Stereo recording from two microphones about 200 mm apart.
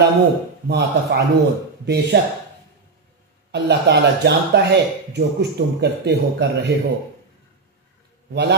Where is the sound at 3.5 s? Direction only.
60° right (ahead or behind).